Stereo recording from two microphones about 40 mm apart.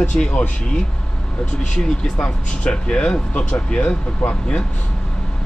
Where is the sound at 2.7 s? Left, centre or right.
Left.